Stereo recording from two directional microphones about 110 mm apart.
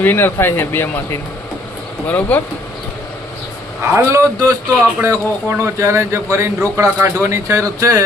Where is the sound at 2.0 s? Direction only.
15° left (ahead or behind).